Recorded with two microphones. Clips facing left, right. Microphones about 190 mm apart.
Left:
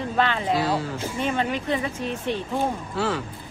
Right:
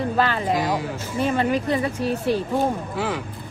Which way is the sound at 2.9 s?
15° right (ahead or behind).